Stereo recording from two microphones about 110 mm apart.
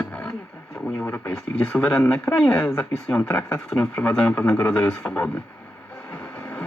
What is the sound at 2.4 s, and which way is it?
Speech, 15° left (ahead or behind).